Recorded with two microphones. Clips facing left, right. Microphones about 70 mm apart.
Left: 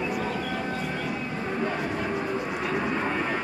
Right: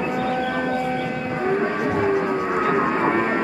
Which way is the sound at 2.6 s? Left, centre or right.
Right.